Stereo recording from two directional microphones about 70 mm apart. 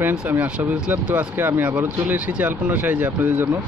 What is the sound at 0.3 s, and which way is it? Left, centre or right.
Speech, right.